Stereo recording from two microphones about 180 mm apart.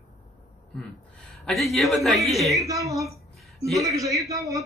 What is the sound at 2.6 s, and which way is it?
A man's voice, 20° right (ahead or behind).